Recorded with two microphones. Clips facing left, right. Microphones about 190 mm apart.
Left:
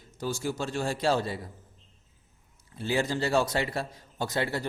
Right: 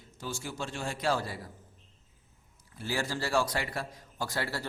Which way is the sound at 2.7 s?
20° left (ahead or behind).